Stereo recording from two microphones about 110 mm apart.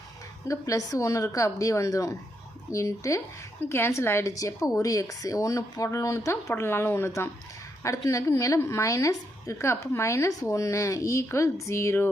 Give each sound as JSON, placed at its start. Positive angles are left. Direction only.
{"t": 0.4, "sound": "a woman's voice", "side_deg": 30}